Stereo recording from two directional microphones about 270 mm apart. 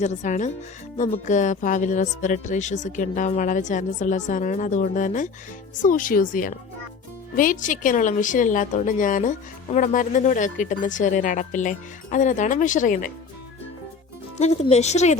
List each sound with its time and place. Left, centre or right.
0.0 s speech: left
14.3 s speech: left